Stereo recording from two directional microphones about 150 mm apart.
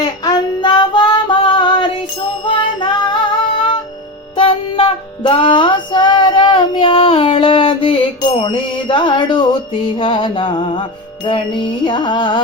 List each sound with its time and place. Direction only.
0.0 s female singing: 25° left (ahead or behind)
2.4 s music: 30° left (ahead or behind)
4.4 s music: 35° left (ahead or behind)